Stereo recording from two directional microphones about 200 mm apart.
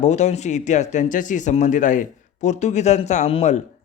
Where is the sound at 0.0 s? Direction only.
35° left (ahead or behind).